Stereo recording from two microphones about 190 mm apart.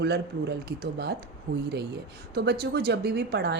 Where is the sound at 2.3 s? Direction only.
55° right (ahead or behind).